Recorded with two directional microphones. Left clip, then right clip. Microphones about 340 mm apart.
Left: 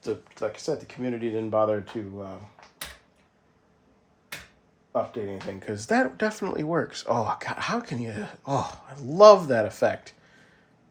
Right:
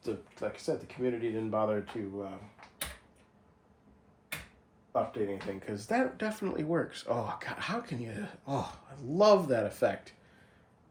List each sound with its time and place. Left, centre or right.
0.0 s speech: left
5.6 s speech: left